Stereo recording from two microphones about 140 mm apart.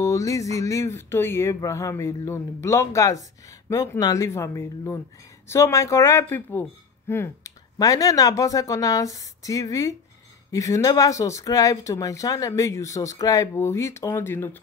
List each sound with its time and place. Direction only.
0.0 s speech: 25° left (ahead or behind)